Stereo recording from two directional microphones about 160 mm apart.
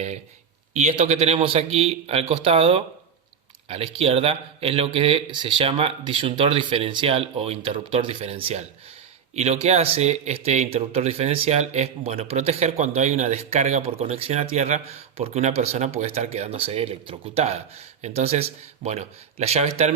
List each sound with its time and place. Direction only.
0.8 s speech: 45° right (ahead or behind)